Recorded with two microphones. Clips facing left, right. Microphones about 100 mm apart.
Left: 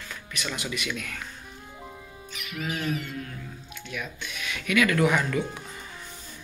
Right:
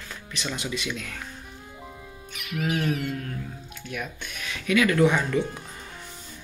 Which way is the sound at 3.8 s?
45° right (ahead or behind).